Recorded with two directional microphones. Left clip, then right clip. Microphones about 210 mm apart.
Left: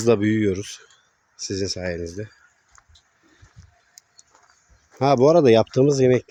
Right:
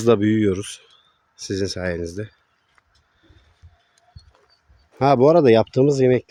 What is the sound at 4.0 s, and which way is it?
Bird, 30° left (ahead or behind).